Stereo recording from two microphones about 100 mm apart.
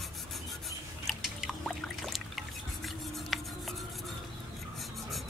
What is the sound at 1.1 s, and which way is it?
Trickle, centre (ahead or behind).